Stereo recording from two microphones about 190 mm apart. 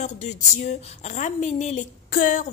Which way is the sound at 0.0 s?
40° left (ahead or behind).